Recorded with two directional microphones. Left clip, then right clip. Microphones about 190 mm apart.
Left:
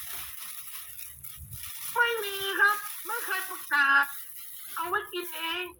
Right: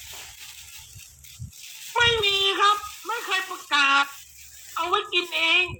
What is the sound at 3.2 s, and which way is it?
Speech, 60° right (ahead or behind).